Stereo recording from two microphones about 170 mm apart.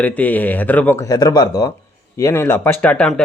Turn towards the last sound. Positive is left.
turn(degrees=10)  # may be behind; listen again after turning